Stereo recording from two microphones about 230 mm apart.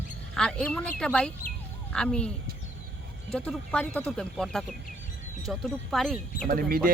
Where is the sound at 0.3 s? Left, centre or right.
Centre.